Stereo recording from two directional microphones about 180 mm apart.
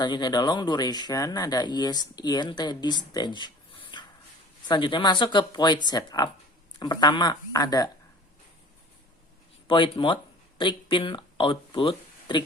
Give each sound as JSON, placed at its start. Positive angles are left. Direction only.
{"t": 0.0, "sound": "speech", "side_deg": 25}
{"t": 9.6, "sound": "speech", "side_deg": 30}